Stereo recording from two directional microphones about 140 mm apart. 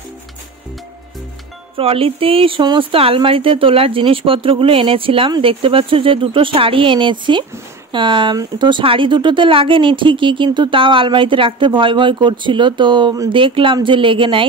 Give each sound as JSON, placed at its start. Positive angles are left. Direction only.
{"t": 1.8, "sound": "speech", "side_deg": -45}